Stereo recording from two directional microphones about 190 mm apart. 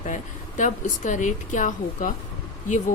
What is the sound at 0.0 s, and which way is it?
Speech, 40° left (ahead or behind).